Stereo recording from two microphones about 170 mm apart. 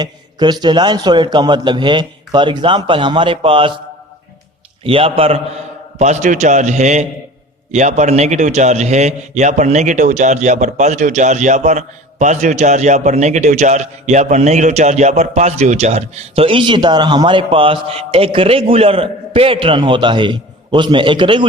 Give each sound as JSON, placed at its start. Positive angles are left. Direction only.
{"t": 0.0, "sound": "a man's voice", "side_deg": -25}
{"t": 4.8, "sound": "a man's voice", "side_deg": -35}